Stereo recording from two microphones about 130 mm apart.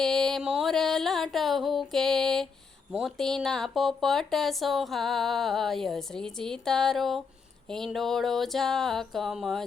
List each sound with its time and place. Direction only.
0.0 s music: 5° left (ahead or behind)
3.0 s speech: 5° left (ahead or behind)